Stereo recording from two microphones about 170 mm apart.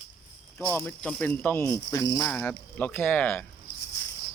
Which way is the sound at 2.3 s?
10° left (ahead or behind).